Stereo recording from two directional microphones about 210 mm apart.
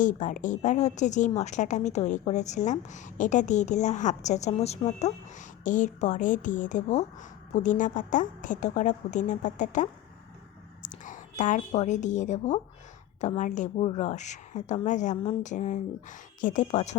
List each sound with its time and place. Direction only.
0.0 s a woman's voice: 35° left (ahead or behind)